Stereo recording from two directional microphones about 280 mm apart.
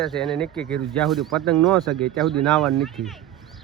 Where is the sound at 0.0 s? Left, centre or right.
Centre.